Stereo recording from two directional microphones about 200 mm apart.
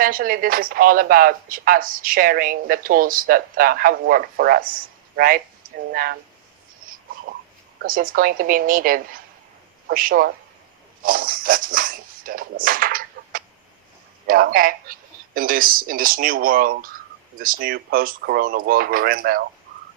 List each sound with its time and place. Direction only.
0.0 s speech: 45° right (ahead or behind)
7.8 s speech: 45° right (ahead or behind)